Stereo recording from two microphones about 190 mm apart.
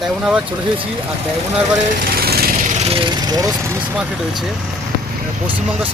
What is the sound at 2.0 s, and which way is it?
Lawn mower, 50° right (ahead or behind).